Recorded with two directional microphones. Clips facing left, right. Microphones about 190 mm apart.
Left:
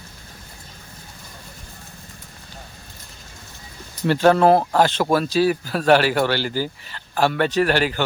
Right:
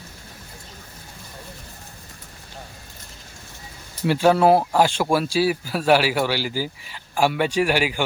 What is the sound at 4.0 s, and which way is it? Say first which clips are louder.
Speech: left 2 dB; 10° right (ahead or behind).